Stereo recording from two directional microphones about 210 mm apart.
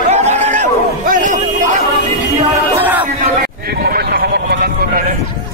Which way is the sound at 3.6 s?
45° right (ahead or behind).